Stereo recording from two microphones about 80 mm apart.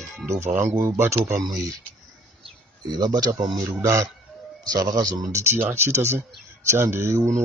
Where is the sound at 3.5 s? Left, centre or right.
Right.